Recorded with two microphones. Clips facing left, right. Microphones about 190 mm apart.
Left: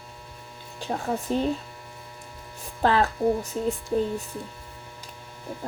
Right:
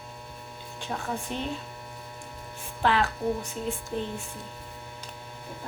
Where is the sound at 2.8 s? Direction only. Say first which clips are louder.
Left 4 dB; 40° left (ahead or behind).